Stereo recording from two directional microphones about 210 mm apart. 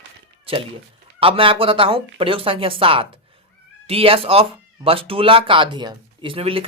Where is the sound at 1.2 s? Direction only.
25° right (ahead or behind).